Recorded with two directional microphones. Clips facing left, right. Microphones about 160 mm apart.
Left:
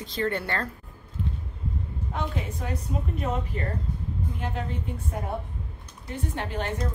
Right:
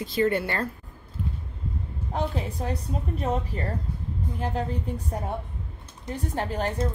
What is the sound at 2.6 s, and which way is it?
Speech, 35° right (ahead or behind).